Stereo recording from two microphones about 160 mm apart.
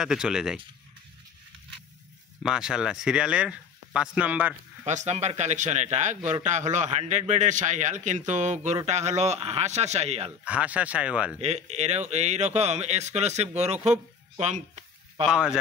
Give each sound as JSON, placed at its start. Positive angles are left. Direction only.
{"t": 0.0, "sound": "speech", "side_deg": -5}
{"t": 2.4, "sound": "speech", "side_deg": -5}
{"t": 4.8, "sound": "speech", "side_deg": -45}
{"t": 10.4, "sound": "speech", "side_deg": -10}
{"t": 11.3, "sound": "speech", "side_deg": -40}
{"t": 15.2, "sound": "speech", "side_deg": -5}